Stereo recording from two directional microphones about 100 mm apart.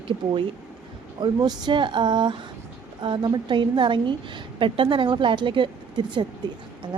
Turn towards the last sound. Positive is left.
turn(degrees=-50)  # may be behind; listen again after turning